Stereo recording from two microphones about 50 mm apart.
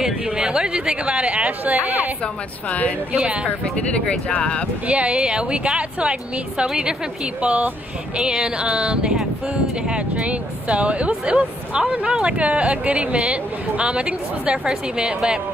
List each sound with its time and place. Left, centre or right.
0.0 s speech: centre
4.1 s speech: left
4.8 s speech: right
7.4 s speech: right